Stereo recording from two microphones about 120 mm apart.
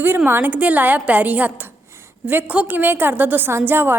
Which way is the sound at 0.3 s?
15° right (ahead or behind).